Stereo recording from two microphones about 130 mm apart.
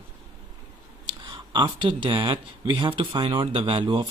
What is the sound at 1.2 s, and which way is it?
Speech, 35° right (ahead or behind).